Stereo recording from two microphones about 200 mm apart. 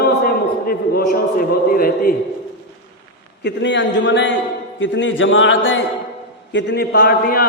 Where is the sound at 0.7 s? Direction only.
45° left (ahead or behind).